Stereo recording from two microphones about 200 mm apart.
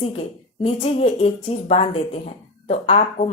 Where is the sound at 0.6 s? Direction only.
30° left (ahead or behind).